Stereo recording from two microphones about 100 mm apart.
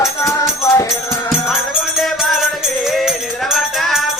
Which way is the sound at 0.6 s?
30° left (ahead or behind).